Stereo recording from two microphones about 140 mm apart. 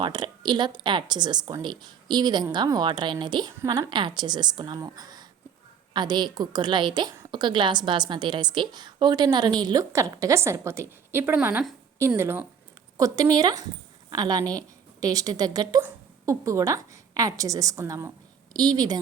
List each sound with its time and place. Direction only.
0.0 s a woman's voice: 30° right (ahead or behind)